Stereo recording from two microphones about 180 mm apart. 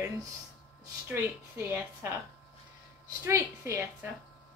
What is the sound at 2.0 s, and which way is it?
Speech, 15° right (ahead or behind).